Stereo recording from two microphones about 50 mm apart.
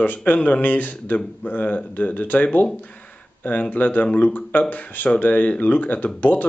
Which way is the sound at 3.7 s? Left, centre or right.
Left.